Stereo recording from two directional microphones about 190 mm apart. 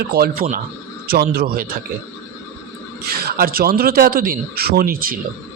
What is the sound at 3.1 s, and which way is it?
A man's voice, 55° right (ahead or behind).